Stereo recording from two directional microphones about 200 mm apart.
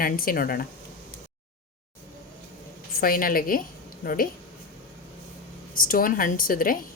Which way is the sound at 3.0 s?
45° left (ahead or behind).